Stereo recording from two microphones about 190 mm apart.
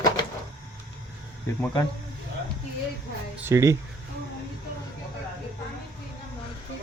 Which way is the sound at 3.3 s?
15° right (ahead or behind).